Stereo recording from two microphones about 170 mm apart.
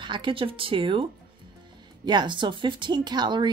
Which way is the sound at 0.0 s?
30° right (ahead or behind).